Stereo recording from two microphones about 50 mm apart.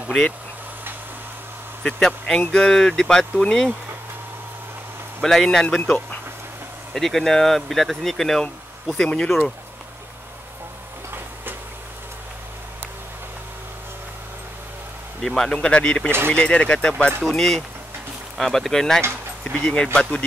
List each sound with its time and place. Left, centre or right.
1.8 s speech: centre
5.2 s speech: centre
6.9 s speech: centre
8.9 s speech: centre
15.2 s speech: centre
15.5 s speech: left
17.3 s speech: centre
19.4 s speech: centre